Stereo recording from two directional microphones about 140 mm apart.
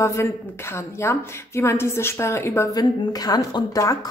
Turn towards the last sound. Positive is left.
turn(degrees=25)  # may be behind; listen again after turning